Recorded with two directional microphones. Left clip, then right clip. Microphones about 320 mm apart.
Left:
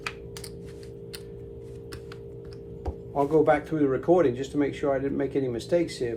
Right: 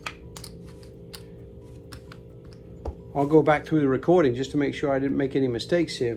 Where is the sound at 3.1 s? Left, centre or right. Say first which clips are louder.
Right 2 dB; right.